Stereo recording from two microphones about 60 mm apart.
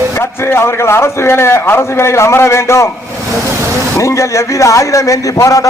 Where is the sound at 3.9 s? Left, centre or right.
Left.